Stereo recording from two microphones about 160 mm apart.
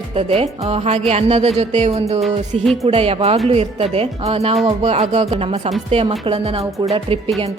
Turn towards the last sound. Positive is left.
turn(degrees=-35)  # may be behind; listen again after turning